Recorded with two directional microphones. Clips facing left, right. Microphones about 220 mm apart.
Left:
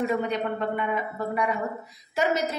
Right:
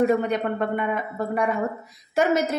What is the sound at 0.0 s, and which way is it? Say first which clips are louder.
Speech: right 5 dB; 50° right (ahead or behind).